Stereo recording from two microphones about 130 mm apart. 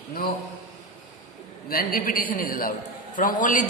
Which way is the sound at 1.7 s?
90° left.